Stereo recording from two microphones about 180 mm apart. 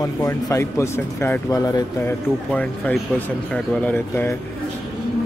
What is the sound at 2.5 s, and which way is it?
Speech, 10° left (ahead or behind).